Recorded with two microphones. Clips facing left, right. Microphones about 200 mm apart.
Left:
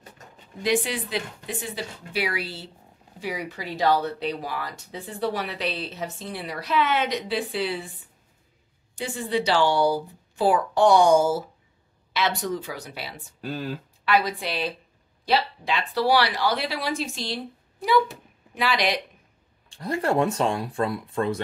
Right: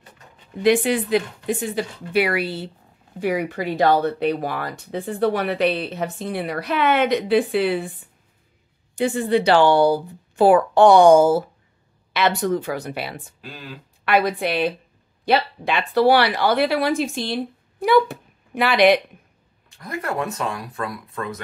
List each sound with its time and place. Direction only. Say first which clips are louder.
0.6 s speech: right 7 dB; 55° right (ahead or behind)
8.9 s speech: right 7 dB; 55° right (ahead or behind)
13.4 s speech: left 7 dB; 45° left (ahead or behind)
14.0 s speech: right 4 dB; 55° right (ahead or behind)
19.7 s speech: left 3 dB; 30° left (ahead or behind)